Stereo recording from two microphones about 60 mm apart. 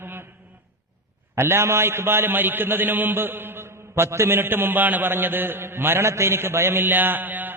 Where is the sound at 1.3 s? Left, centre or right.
Right.